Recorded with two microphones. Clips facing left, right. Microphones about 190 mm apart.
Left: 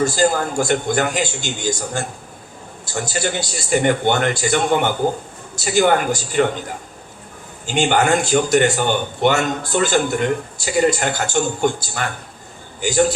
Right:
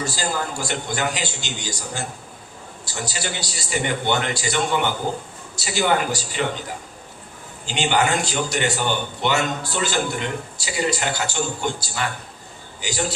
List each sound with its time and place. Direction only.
0.0 s a man's voice: 50° left (ahead or behind)
7.7 s a man's voice: 50° left (ahead or behind)